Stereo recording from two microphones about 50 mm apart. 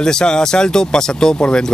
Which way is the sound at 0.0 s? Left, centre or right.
Centre.